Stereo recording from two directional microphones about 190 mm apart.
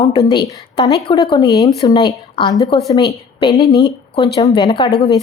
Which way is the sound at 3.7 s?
25° left (ahead or behind).